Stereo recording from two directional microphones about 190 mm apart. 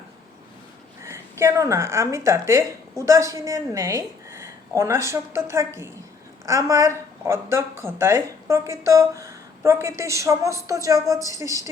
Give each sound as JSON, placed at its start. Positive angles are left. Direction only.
{"t": 1.0, "sound": "a woman's voice", "side_deg": -15}